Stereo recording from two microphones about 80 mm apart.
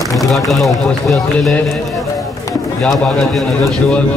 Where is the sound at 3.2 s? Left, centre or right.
Centre.